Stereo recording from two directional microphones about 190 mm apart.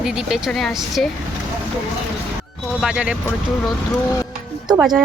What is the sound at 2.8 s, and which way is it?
Speech, 5° right (ahead or behind).